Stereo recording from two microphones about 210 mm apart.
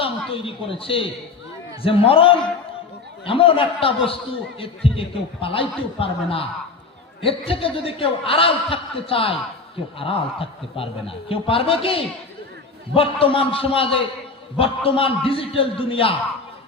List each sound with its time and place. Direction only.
0.0 s a woman's voice: 25° left (ahead or behind)